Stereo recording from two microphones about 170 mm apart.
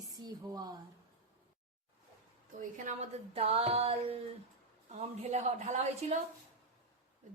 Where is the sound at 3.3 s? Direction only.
35° right (ahead or behind).